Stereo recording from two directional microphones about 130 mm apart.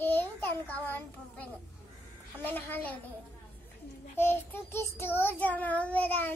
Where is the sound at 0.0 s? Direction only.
15° left (ahead or behind).